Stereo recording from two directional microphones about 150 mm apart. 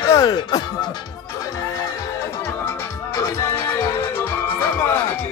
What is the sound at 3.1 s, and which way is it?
Music, 20° left (ahead or behind).